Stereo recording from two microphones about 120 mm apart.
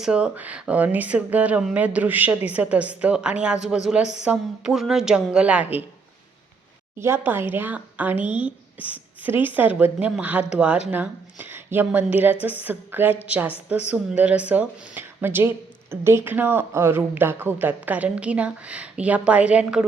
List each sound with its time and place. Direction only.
0.0 s speech: 10° right (ahead or behind)
7.0 s a woman's voice: 20° right (ahead or behind)